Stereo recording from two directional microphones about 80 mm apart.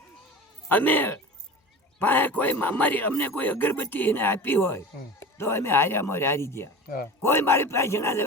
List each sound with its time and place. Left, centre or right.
0.7 s a man's voice: left